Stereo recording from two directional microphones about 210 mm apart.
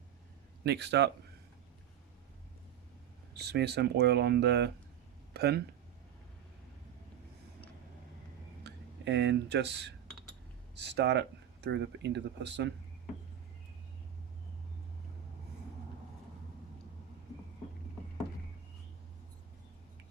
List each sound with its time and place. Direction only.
0.6 s speech: 55° right (ahead or behind)
3.3 s speech: 50° right (ahead or behind)
8.6 s speech: 55° right (ahead or behind)